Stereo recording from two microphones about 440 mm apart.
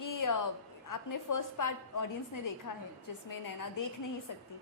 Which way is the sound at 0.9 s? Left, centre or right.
Left.